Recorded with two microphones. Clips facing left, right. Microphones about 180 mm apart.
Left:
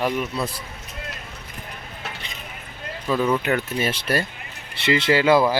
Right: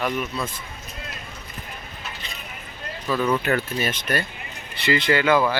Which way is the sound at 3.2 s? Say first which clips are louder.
Even; 15° left (ahead or behind).